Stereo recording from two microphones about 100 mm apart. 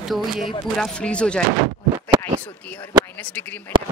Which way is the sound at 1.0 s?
10° left (ahead or behind).